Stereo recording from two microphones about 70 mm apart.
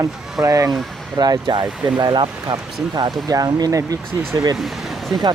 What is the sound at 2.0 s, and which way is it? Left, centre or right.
Speech, right.